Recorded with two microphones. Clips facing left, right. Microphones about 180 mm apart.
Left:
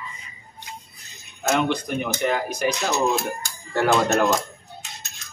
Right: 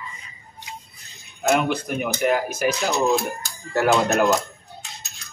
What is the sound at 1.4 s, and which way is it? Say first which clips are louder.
Speech: right 1 dB; 5° right (ahead or behind).